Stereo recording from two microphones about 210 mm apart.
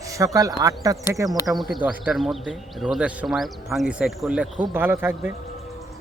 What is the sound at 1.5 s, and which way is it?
Speech, centre (ahead or behind).